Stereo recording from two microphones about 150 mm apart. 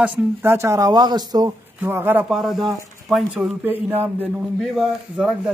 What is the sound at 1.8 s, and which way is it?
Speech, 15° right (ahead or behind).